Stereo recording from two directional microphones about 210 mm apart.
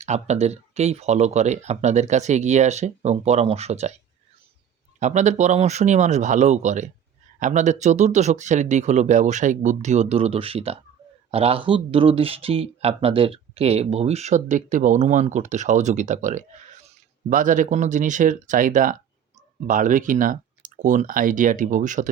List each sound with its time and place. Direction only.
0.0 s speech: 30° right (ahead or behind)
4.9 s speech: 35° right (ahead or behind)